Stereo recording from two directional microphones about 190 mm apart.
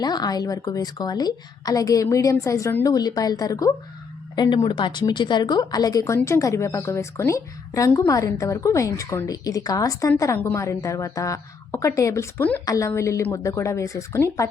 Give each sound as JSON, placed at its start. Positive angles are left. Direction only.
{"t": 0.0, "sound": "a woman's voice", "side_deg": 20}